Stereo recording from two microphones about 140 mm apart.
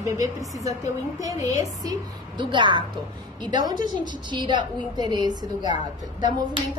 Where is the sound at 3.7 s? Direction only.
70° left (ahead or behind).